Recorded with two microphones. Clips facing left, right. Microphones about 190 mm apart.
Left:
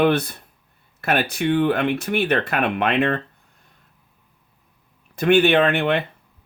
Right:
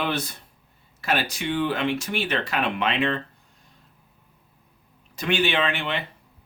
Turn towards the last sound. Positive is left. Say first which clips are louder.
# left 8 dB
turn(degrees=55)  # may be behind; listen again after turning